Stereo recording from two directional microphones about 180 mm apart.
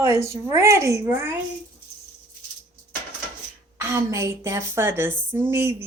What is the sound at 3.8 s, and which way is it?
A woman's voice, 15° right (ahead or behind).